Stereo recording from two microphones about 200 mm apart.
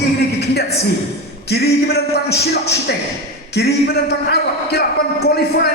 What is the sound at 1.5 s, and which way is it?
Speech, 55° left (ahead or behind).